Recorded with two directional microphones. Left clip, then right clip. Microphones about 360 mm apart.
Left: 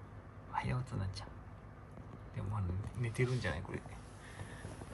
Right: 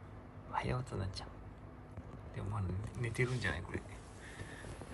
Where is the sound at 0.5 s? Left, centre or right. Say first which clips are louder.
Right 1 dB; centre.